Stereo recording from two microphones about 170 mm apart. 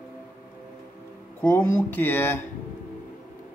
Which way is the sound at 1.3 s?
10° left (ahead or behind).